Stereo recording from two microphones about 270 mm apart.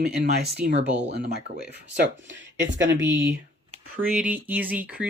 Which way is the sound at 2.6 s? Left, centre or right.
Right.